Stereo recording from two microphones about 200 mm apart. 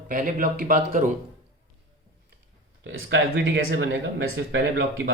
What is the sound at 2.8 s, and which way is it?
Speech, 60° right (ahead or behind).